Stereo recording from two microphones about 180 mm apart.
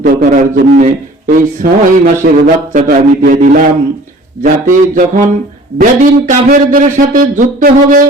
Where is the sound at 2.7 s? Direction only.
50° right (ahead or behind).